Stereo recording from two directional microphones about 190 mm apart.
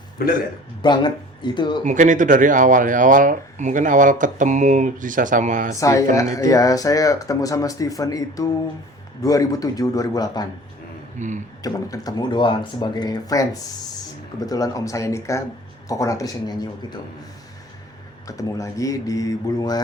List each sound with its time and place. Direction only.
0.8 s speech: 25° left (ahead or behind)
1.8 s speech: 40° right (ahead or behind)
5.8 s speech: 15° left (ahead or behind)
11.2 s speech: 40° right (ahead or behind)
11.6 s speech: 20° left (ahead or behind)
18.3 s speech: 15° left (ahead or behind)